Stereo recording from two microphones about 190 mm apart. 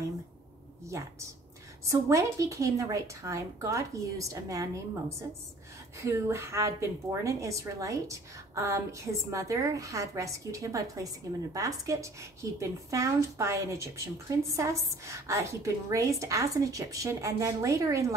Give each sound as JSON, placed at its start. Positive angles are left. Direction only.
{"t": 0.8, "sound": "a woman's voice", "side_deg": -15}
{"t": 5.9, "sound": "a woman's voice", "side_deg": -15}